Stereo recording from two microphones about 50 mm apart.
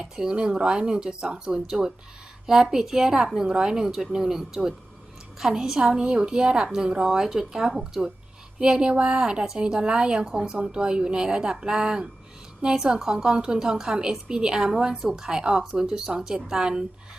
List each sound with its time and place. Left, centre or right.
0.0 s a woman's voice: centre